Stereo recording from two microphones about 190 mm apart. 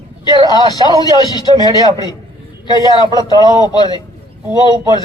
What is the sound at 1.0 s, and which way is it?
A man's voice, 20° left (ahead or behind).